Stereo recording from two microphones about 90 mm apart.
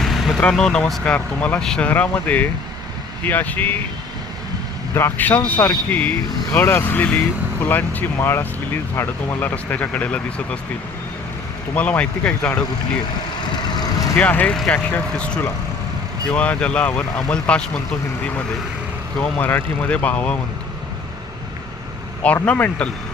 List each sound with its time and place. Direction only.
0.0 s vehicle: centre (ahead or behind)
0.4 s speech: 10° left (ahead or behind)
1.9 s speech: 20° left (ahead or behind)
4.9 s speech: 25° left (ahead or behind)
11.7 s speech: 15° left (ahead or behind)
13.5 s vehicle: 50° left (ahead or behind)
14.2 s speech: 15° left (ahead or behind)
19.2 s speech: 20° left (ahead or behind)
22.4 s speech: 15° left (ahead or behind)